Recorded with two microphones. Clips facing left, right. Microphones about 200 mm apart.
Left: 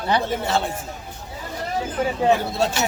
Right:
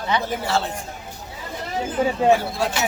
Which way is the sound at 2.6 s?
25° left (ahead or behind).